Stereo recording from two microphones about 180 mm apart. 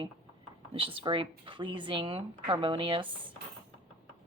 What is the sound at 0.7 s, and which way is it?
Speech, 30° right (ahead or behind).